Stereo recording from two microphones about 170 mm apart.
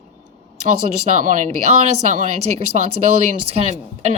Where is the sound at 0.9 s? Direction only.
45° right (ahead or behind).